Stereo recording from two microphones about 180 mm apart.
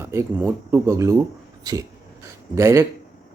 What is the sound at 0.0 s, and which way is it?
Speech, 15° right (ahead or behind).